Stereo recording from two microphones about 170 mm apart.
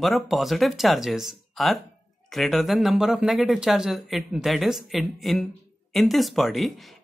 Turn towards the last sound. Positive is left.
turn(degrees=0)  # may be behind; listen again after turning